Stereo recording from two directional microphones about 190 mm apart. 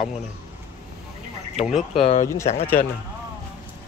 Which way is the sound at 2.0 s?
30° left (ahead or behind).